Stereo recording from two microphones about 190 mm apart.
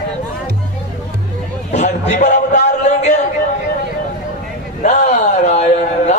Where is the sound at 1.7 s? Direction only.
35° left (ahead or behind).